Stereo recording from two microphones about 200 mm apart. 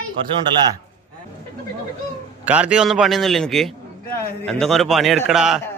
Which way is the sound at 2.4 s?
5° right (ahead or behind).